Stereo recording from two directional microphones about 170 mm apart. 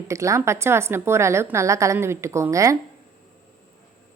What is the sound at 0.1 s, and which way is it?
A woman's voice, 15° right (ahead or behind).